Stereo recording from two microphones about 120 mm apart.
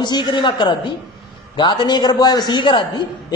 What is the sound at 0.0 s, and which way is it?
A woman's voice, 40° left (ahead or behind).